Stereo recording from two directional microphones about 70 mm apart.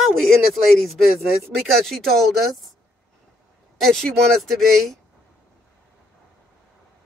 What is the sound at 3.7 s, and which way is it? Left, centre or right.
Speech, centre.